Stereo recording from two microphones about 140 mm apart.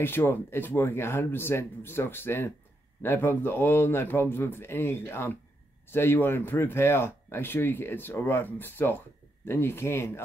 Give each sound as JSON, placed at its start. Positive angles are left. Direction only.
{"t": 0.0, "sound": "speech", "side_deg": 15}